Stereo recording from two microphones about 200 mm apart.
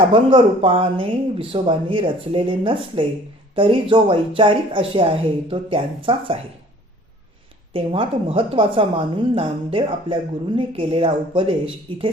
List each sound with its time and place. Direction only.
0.1 s a woman's voice: 25° right (ahead or behind)
7.7 s a woman's voice: 25° right (ahead or behind)